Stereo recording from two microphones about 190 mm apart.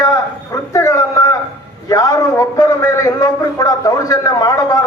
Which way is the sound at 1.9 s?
20° left (ahead or behind).